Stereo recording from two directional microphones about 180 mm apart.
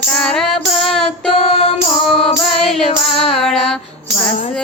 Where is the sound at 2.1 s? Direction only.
Centre (ahead or behind).